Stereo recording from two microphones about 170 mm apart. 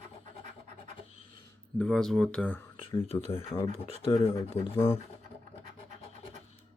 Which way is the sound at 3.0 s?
35° left (ahead or behind).